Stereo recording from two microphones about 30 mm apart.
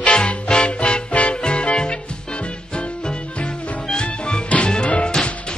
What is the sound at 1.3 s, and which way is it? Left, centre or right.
Music, left.